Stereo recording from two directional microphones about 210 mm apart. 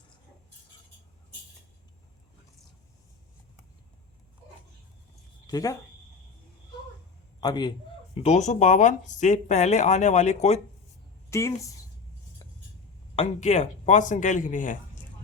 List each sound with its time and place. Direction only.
5.5 s speech: 15° left (ahead or behind)
7.4 s a man's voice: 20° left (ahead or behind)
8.1 s speech: 30° left (ahead or behind)
11.3 s a woman's voice: 15° left (ahead or behind)
13.1 s speech: 30° left (ahead or behind)